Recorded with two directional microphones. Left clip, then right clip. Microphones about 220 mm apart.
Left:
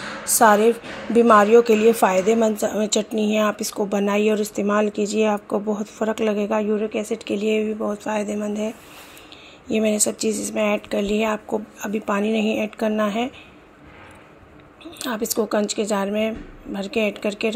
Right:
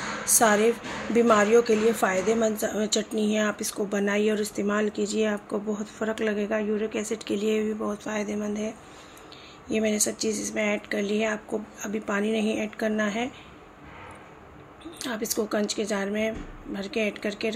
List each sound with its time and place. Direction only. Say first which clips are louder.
0.2 s a woman's voice: left 6 dB; 20° left (ahead or behind)
14.9 s a woman's voice: left 5 dB; 20° left (ahead or behind)